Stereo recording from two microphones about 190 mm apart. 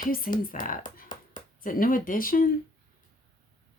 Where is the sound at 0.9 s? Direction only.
45° left (ahead or behind).